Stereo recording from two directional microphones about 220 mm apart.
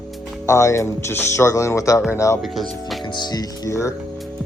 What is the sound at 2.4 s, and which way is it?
Speech, centre (ahead or behind).